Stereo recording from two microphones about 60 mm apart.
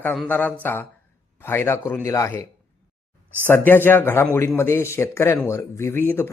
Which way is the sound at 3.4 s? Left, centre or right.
Left.